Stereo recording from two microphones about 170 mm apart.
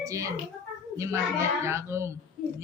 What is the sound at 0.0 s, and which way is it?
A child's voice, 20° right (ahead or behind).